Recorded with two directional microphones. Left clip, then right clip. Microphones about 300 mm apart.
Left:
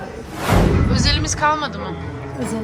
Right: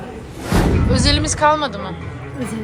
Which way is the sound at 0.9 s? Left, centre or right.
Centre.